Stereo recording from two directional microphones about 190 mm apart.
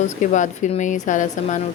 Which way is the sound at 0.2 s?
40° left (ahead or behind).